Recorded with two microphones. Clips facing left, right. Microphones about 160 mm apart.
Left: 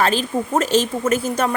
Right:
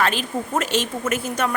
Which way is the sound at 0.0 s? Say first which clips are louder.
Left 4 dB; 35° left (ahead or behind).